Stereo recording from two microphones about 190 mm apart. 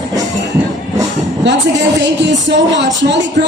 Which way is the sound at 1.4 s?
70° right (ahead or behind).